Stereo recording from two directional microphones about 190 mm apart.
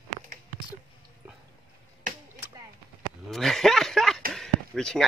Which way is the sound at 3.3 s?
Centre (ahead or behind).